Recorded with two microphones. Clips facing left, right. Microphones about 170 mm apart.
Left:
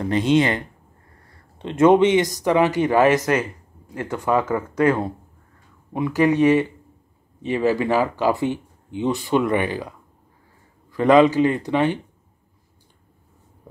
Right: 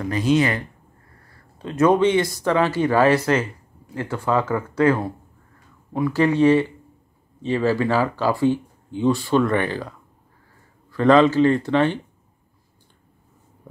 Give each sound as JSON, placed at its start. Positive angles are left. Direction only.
{"t": 0.0, "sound": "speech", "side_deg": 25}